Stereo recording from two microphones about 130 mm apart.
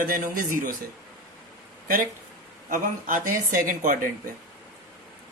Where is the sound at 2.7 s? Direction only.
90° right.